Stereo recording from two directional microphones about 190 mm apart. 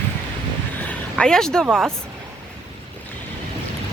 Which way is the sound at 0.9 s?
5° left (ahead or behind).